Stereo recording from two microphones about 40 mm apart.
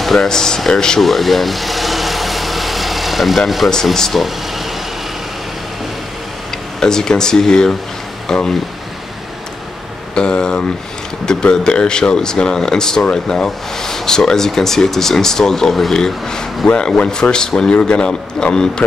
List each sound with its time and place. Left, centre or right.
0.0 s speech: centre
1.0 s vehicle: centre
3.4 s speech: centre
3.9 s speech: centre
4.2 s vehicle: centre
6.8 s speech: centre
10.1 s a sound: left
11.3 s speech: centre